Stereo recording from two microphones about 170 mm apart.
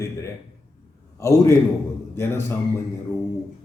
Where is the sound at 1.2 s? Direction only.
15° left (ahead or behind).